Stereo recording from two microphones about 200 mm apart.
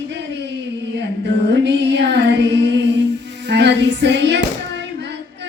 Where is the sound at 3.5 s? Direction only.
60° right (ahead or behind).